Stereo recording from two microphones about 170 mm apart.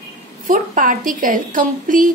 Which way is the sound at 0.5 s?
50° right (ahead or behind).